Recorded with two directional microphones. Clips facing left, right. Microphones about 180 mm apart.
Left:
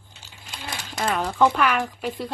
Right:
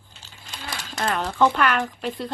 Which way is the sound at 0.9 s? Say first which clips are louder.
Left 1 dB; centre (ahead or behind).